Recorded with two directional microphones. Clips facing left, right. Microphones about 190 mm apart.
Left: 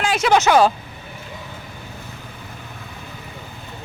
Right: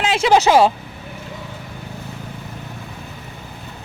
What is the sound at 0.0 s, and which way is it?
Vehicle, 25° right (ahead or behind).